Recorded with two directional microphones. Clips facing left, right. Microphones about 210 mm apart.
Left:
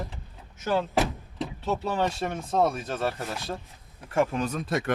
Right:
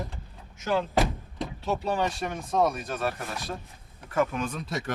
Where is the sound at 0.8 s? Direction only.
Centre (ahead or behind).